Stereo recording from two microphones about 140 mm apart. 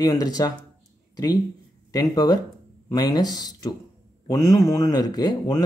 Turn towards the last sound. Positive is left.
turn(degrees=25)  # may be behind; listen again after turning